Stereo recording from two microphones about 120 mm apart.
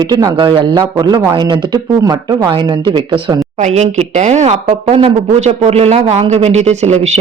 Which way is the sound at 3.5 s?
75° right (ahead or behind).